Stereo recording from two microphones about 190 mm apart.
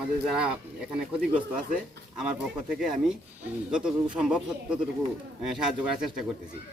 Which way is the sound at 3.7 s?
5° right (ahead or behind).